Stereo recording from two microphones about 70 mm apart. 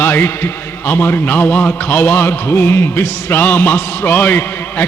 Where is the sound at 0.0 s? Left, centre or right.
Left.